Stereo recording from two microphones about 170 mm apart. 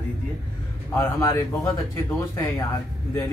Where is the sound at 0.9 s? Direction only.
15° left (ahead or behind).